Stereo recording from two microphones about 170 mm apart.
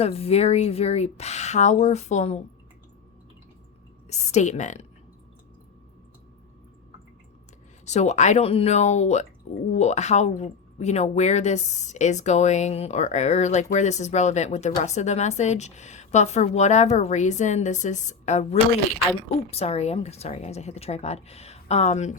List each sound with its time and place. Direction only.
0.0 s speech: 35° left (ahead or behind)
4.1 s a woman's voice: 45° left (ahead or behind)
7.9 s a woman's voice: 40° left (ahead or behind)
19.5 s speech: 40° left (ahead or behind)